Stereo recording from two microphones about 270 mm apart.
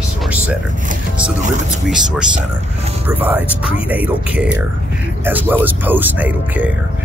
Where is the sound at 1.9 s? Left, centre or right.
Centre.